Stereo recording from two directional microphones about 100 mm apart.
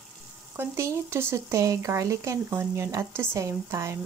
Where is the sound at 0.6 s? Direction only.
25° right (ahead or behind).